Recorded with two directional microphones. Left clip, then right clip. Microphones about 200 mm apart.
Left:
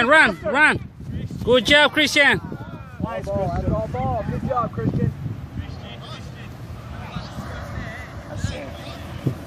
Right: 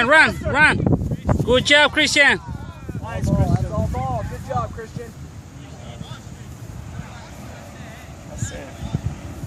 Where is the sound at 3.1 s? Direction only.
55° right (ahead or behind).